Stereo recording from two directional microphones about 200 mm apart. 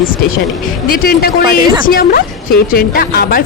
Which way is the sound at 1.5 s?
20° right (ahead or behind).